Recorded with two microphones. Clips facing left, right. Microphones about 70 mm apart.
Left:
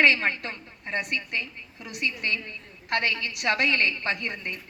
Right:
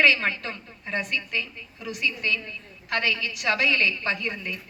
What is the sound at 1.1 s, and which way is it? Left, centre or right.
A woman's voice, left.